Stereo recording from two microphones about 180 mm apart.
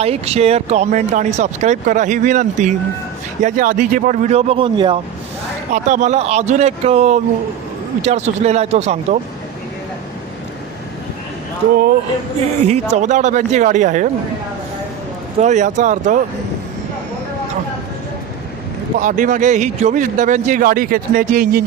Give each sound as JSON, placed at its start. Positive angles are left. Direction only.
{"t": 0.0, "sound": "speech", "side_deg": -35}
{"t": 5.7, "sound": "speech", "side_deg": -40}
{"t": 12.6, "sound": "speech", "side_deg": -40}
{"t": 15.4, "sound": "speech", "side_deg": -40}
{"t": 18.9, "sound": "speech", "side_deg": -45}